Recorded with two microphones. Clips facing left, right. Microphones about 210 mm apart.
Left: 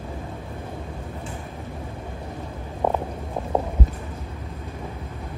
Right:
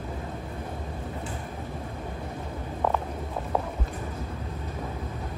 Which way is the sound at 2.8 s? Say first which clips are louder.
Left 4 dB; 25° left (ahead or behind).